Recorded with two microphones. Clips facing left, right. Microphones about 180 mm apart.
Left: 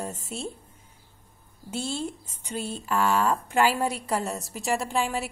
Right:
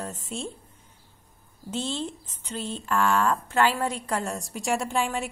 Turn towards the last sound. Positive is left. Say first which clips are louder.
# even
turn(degrees=0)  # may be behind; listen again after turning